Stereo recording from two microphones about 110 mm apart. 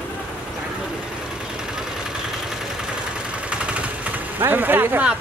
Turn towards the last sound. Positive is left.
turn(degrees=-20)  # may be behind; listen again after turning